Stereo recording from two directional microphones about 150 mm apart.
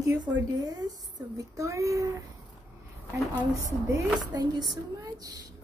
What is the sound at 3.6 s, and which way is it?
Speech, 20° right (ahead or behind).